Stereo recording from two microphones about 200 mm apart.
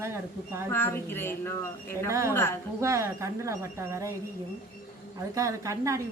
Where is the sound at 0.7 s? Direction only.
10° left (ahead or behind).